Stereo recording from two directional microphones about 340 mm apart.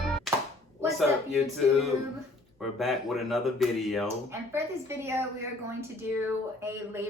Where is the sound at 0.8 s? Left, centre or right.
Centre.